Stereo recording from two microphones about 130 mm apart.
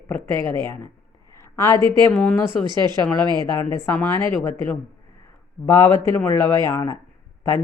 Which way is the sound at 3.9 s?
15° left (ahead or behind).